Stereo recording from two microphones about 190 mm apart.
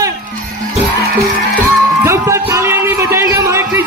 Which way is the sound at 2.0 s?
15° right (ahead or behind).